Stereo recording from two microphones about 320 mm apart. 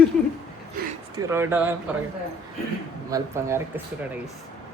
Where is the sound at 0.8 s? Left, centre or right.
Right.